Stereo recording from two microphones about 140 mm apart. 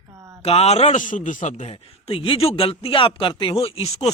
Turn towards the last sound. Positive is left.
turn(degrees=50)  # may be behind; listen again after turning